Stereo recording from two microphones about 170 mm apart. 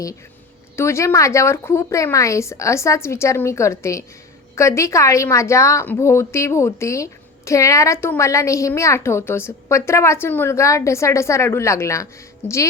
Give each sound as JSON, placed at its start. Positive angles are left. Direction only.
{"t": 0.8, "sound": "a woman's voice", "side_deg": 15}